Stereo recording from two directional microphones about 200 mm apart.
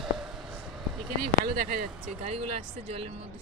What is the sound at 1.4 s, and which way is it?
Speech, 45° right (ahead or behind).